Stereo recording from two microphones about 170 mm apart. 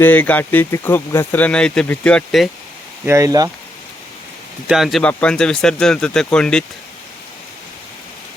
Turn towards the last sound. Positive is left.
turn(degrees=5)  # may be behind; listen again after turning